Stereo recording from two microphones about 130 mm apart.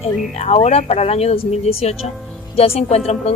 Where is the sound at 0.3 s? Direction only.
55° left (ahead or behind).